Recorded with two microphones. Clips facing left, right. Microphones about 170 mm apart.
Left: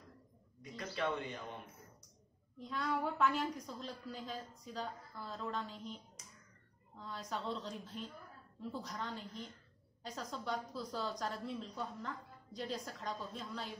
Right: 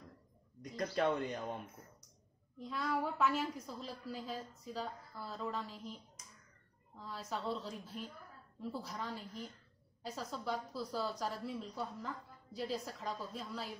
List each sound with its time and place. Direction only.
0.9 s speech: 45° right (ahead or behind)
2.6 s a woman's voice: centre (ahead or behind)
7.0 s a woman's voice: 5° right (ahead or behind)